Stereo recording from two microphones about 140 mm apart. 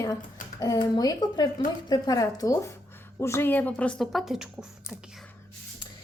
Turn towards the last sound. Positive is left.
turn(degrees=-5)  # may be behind; listen again after turning